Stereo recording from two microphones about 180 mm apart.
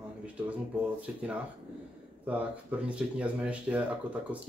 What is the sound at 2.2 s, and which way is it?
Speech, 10° right (ahead or behind).